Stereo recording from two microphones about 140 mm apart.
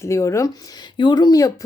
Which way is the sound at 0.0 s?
20° left (ahead or behind).